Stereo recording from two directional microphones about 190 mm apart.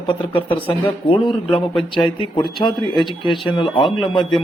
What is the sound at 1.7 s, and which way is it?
Speech, centre (ahead or behind).